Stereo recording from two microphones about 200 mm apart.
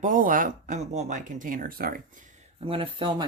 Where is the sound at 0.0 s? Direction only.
40° right (ahead or behind).